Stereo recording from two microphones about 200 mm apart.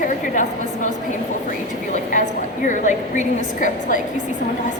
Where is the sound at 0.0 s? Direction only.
40° left (ahead or behind).